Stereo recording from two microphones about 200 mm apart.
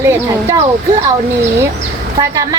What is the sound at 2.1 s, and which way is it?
Speech, 20° right (ahead or behind).